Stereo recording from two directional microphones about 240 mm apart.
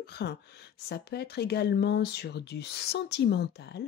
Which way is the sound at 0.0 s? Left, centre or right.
Left.